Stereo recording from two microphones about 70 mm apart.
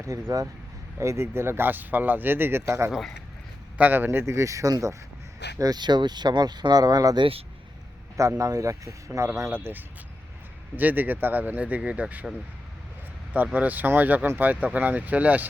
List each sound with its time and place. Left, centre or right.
0.0 s speech: right
3.8 s speech: right
5.5 s speech: right
8.4 s speech: right
10.8 s speech: right
13.3 s speech: right